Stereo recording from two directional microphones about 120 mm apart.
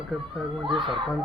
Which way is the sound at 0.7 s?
40° right (ahead or behind).